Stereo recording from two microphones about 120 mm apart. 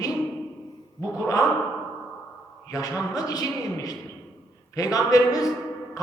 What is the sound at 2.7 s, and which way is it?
A man's voice, 30° left (ahead or behind).